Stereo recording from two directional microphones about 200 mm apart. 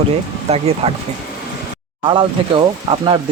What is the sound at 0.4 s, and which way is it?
Speech, 30° right (ahead or behind).